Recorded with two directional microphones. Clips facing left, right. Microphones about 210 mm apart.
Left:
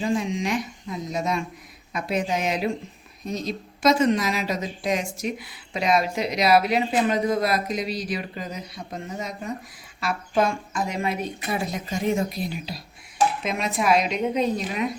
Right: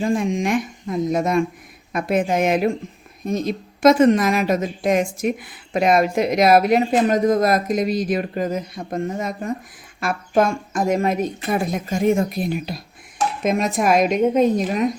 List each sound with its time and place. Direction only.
0.0 s speech: 50° right (ahead or behind)